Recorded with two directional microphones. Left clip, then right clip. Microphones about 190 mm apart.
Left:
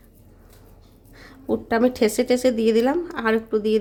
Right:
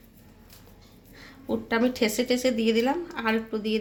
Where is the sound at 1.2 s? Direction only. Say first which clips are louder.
Left 5 dB; 55° left (ahead or behind).